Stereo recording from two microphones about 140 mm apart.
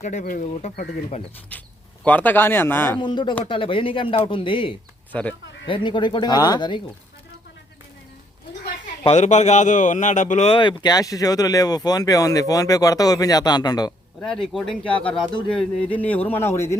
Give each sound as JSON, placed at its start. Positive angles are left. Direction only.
{"t": 0.0, "sound": "a man's voice", "side_deg": 60}
{"t": 2.0, "sound": "speech", "side_deg": 10}
{"t": 3.0, "sound": "speech", "side_deg": 35}
{"t": 5.1, "sound": "speech", "side_deg": 10}
{"t": 5.6, "sound": "speech", "side_deg": 35}
{"t": 9.0, "sound": "a man's voice", "side_deg": 55}
{"t": 10.5, "sound": "speech", "side_deg": 35}
{"t": 14.3, "sound": "speech", "side_deg": 5}